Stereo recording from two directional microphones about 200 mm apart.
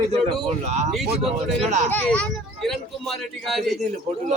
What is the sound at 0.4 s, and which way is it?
Speech, 35° right (ahead or behind).